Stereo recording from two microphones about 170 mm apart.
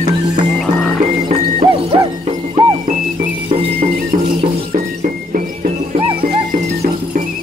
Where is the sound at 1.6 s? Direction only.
35° right (ahead or behind).